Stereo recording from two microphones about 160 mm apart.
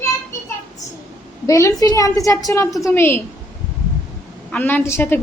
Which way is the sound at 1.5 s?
20° left (ahead or behind).